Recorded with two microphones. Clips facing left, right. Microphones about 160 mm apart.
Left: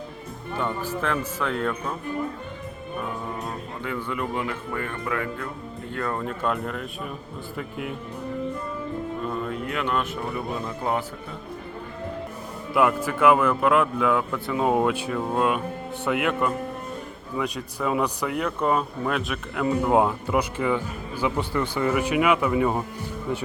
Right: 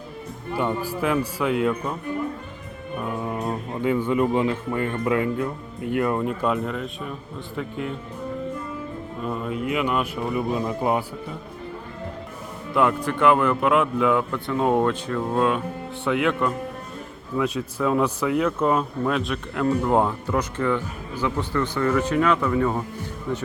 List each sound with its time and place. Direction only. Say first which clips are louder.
0.5 s speech: right 3 dB; 15° right (ahead or behind)
3.4 s speech: right 7 dB; 20° right (ahead or behind); by 7.9 s 5° left (ahead or behind)
9.3 s speech: right 3 dB; 5° right (ahead or behind)
12.7 s speech: even; 5° left (ahead or behind)